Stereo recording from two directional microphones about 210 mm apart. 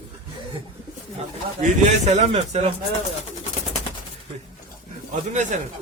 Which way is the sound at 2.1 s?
30° right (ahead or behind).